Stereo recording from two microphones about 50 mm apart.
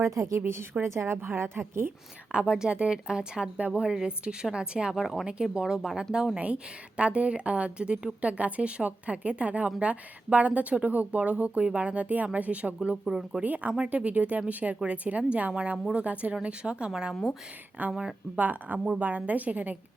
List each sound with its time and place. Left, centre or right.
0.0 s speech: right
0.4 s a woman's voice: right
2.3 s a woman's voice: centre
4.9 s speech: centre
6.3 s a woman's voice: right
13.1 s speech: centre
13.4 s a woman's voice: right
16.9 s speech: centre
17.8 s speech: right